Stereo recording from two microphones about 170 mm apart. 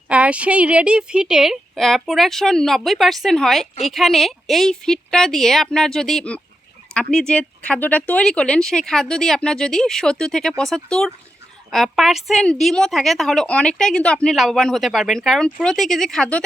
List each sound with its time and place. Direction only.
0.1 s a woman's voice: 5° right (ahead or behind)